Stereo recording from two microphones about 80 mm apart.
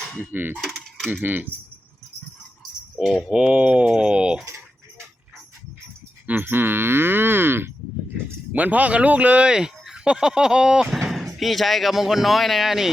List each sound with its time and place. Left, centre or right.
0.3 s speech: right
0.5 s mechanisms: centre
1.2 s speech: right
3.0 s speech: centre
3.2 s speech: centre
6.2 s speech: right; by 12.9 s centre